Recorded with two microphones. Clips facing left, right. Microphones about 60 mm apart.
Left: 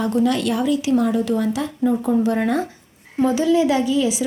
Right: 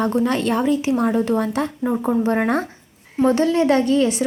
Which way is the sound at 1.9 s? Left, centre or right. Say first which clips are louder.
Left 1 dB; right.